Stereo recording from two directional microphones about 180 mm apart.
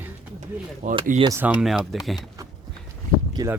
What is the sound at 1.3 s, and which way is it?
Speech, 10° right (ahead or behind).